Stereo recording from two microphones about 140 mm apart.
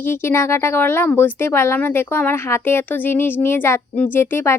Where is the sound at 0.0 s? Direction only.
15° left (ahead or behind).